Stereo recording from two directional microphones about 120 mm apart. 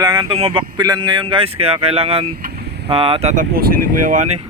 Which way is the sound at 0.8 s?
35° right (ahead or behind).